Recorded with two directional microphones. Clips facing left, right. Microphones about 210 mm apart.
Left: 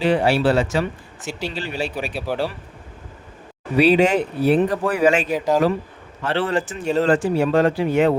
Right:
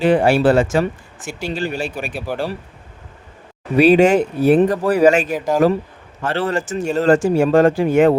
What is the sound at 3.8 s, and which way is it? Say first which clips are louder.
Speech: right 4 dB; 45° right (ahead or behind).